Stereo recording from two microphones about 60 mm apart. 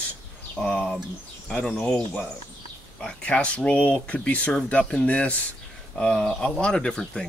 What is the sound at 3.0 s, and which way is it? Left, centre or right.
Speech, centre.